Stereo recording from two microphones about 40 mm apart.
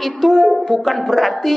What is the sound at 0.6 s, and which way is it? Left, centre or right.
Speech, centre.